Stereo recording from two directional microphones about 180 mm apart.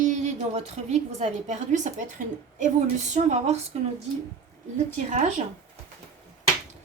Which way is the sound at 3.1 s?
40° right (ahead or behind).